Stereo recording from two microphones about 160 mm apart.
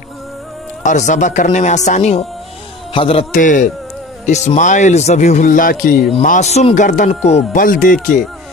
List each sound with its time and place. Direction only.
0.8 s speech: 50° left (ahead or behind)
2.9 s a man's voice: 35° left (ahead or behind)
3.3 s speech: 55° left (ahead or behind)
6.2 s speech: 50° left (ahead or behind)
7.6 s speech: 60° left (ahead or behind)